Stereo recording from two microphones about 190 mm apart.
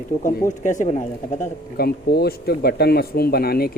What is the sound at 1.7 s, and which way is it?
Speech, 55° left (ahead or behind).